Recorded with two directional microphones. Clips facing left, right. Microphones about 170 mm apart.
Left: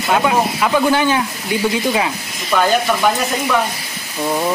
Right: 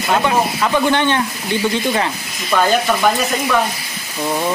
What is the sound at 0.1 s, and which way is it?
Speech, 5° left (ahead or behind).